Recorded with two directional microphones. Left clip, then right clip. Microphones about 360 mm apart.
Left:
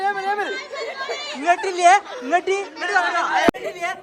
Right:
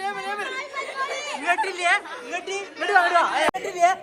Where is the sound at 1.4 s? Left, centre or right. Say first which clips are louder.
Left 6 dB; centre.